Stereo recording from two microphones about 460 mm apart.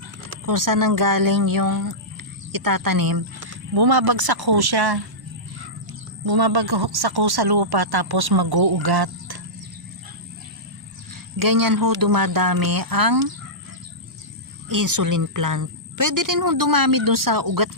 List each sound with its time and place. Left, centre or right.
0.4 s speech: right
6.2 s speech: right
11.3 s speech: right
14.7 s speech: right